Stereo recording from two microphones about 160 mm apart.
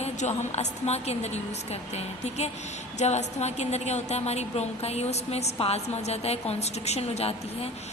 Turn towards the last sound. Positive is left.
turn(degrees=40)  # may be behind; listen again after turning